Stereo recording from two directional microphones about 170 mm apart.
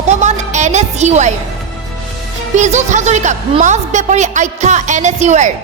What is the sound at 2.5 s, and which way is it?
Speech, 45° right (ahead or behind).